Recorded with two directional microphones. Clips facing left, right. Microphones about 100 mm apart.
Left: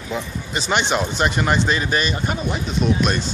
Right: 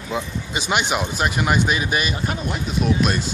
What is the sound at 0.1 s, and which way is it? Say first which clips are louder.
Speech: even; 10° right (ahead or behind).